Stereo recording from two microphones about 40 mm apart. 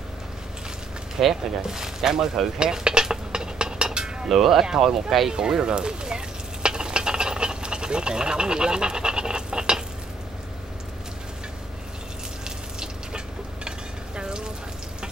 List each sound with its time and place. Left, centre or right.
1.2 s speech: centre
2.6 s a sound: right
4.3 s speech: centre
5.3 s stir: centre
12.4 s frying: centre
13.7 s stir: right